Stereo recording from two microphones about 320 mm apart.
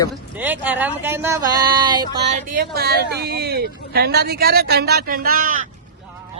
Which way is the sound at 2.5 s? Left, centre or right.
Right.